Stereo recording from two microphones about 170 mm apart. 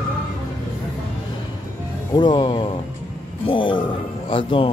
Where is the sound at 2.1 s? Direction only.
25° left (ahead or behind).